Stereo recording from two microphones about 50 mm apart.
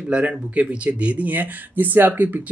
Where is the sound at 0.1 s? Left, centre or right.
Right.